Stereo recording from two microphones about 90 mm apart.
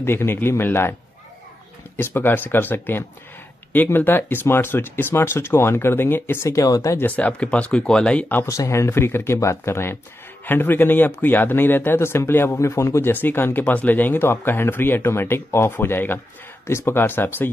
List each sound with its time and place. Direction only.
0.0 s speech: 25° left (ahead or behind)
2.0 s speech: 25° left (ahead or behind)
7.0 s speech: 15° left (ahead or behind)
8.5 s speech: 35° left (ahead or behind)